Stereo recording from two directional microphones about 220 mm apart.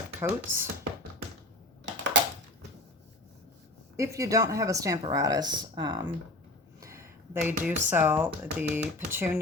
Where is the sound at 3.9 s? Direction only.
15° right (ahead or behind).